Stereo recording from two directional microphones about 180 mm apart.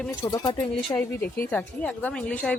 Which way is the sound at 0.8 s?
10° left (ahead or behind).